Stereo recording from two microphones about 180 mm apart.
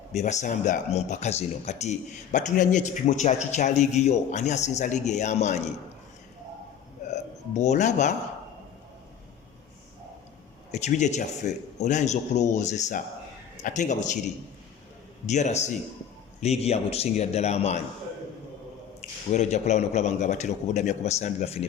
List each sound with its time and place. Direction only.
0.1 s speech: 40° left (ahead or behind)
7.1 s speech: 40° left (ahead or behind)
10.7 s speech: 40° left (ahead or behind)
15.3 s speech: 40° left (ahead or behind)
19.3 s speech: 40° left (ahead or behind)